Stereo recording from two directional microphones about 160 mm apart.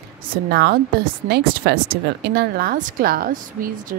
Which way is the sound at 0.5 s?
85° right.